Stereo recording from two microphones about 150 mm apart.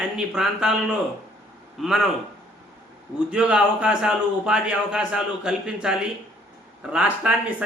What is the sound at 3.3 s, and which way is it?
A man's voice, 5° right (ahead or behind).